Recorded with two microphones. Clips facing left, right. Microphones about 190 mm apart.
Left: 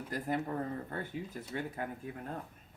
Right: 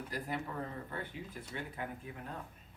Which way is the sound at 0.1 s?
45° left (ahead or behind).